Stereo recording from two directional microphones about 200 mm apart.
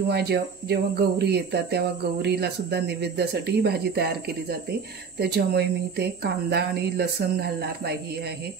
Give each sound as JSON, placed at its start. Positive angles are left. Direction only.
{"t": 0.1, "sound": "speech", "side_deg": -55}